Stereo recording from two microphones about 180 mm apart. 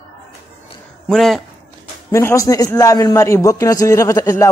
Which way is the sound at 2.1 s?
15° left (ahead or behind).